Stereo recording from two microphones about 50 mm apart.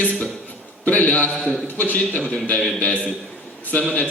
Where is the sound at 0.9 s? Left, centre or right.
Left.